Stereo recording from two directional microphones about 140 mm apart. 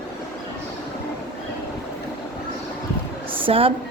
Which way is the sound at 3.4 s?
40° right (ahead or behind).